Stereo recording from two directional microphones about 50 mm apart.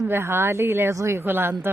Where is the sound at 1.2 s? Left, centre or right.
Right.